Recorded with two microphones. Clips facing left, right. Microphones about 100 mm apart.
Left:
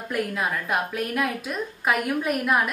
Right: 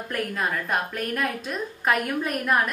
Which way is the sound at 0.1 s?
5° left (ahead or behind).